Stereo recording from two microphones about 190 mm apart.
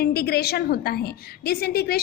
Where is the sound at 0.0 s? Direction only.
55° left (ahead or behind).